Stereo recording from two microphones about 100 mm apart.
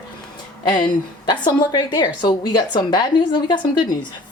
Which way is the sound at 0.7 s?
50° left (ahead or behind).